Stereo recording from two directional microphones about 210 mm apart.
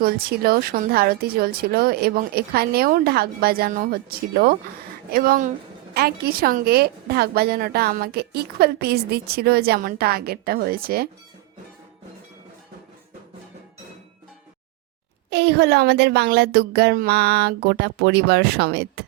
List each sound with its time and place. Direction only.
0.0 s a woman's voice: 45° right (ahead or behind)
15.3 s a woman's voice: 50° right (ahead or behind)